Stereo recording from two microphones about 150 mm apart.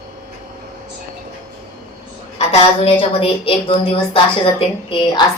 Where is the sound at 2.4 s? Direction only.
40° left (ahead or behind).